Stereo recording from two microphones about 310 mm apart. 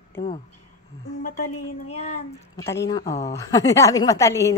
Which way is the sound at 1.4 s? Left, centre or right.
Left.